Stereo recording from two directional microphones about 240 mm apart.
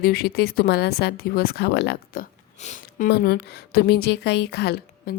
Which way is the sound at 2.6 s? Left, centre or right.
Left.